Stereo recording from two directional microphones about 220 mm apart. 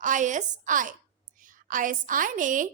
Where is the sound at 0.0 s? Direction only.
35° right (ahead or behind).